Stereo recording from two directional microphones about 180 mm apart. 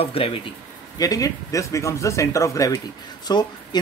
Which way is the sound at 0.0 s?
30° left (ahead or behind).